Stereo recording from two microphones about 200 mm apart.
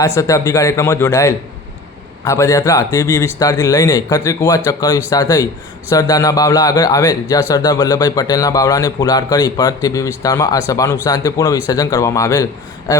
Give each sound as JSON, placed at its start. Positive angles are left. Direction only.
{"t": 0.2, "sound": "speech", "side_deg": 15}